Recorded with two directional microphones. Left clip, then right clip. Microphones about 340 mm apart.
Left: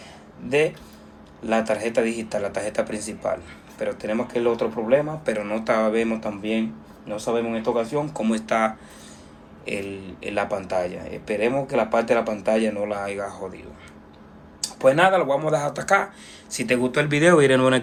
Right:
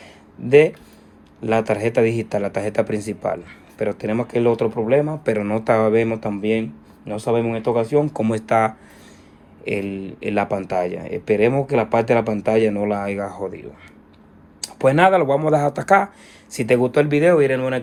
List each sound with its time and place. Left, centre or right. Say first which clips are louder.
0.4 s speech: right 8 dB; right; by 17.7 s centre